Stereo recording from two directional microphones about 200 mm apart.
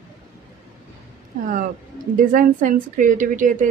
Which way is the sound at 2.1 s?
40° right (ahead or behind).